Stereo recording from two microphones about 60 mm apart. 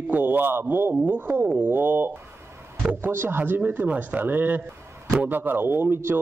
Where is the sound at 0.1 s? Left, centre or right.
Right.